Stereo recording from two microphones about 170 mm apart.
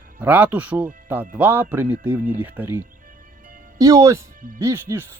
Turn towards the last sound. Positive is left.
turn(degrees=-15)  # may be behind; listen again after turning